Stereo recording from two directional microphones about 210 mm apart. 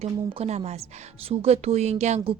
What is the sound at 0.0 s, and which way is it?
A woman's voice, 30° right (ahead or behind).